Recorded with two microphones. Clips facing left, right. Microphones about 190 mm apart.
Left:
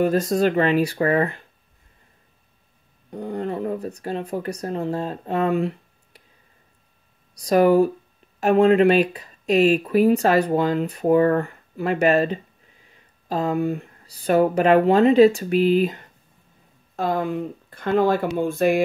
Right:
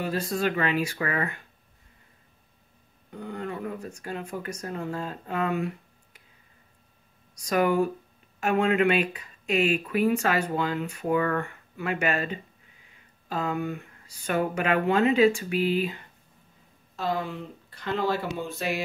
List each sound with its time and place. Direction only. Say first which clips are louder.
0.0 s speech: left 8 dB; 45° left (ahead or behind)
3.1 s speech: left 7 dB; 35° left (ahead or behind)
7.3 s speech: left 8 dB; 35° left (ahead or behind)